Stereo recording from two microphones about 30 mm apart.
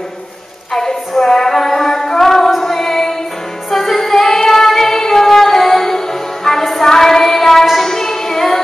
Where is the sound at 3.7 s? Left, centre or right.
Centre.